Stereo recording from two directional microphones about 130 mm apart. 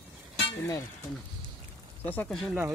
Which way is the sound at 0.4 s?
30° left (ahead or behind).